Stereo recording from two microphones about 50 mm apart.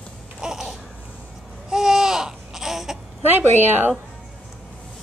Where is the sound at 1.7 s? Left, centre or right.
Centre.